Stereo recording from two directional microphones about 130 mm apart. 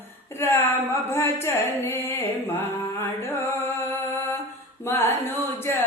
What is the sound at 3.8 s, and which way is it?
Mantra, 20° left (ahead or behind).